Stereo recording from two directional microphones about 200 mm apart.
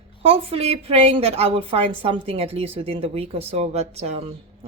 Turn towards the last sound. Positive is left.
turn(degrees=-30)  # may be behind; listen again after turning